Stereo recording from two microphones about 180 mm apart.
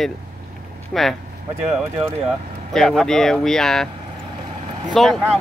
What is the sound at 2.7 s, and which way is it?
Speech, centre (ahead or behind).